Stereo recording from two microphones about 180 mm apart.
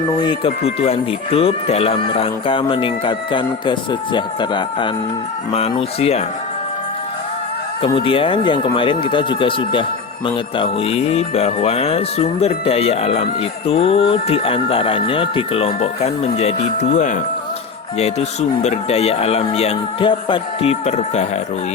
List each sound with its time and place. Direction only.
0.2 s speech: 30° left (ahead or behind)
7.9 s speech: 30° left (ahead or behind)